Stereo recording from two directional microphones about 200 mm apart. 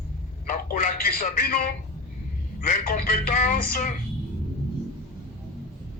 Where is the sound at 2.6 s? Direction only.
45° left (ahead or behind).